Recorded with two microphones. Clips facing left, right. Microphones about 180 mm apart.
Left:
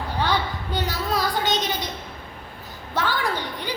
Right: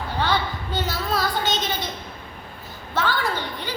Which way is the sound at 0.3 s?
15° left (ahead or behind).